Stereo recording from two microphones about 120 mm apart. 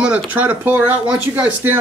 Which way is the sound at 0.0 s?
10° right (ahead or behind).